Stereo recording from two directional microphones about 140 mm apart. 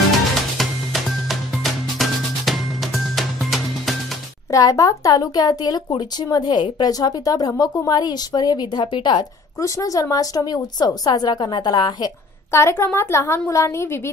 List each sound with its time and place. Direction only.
0.6 s music: centre (ahead or behind)
4.5 s speech: 25° left (ahead or behind)
12.4 s speech: 20° left (ahead or behind)